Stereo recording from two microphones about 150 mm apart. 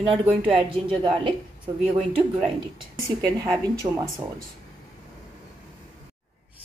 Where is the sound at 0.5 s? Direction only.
35° right (ahead or behind).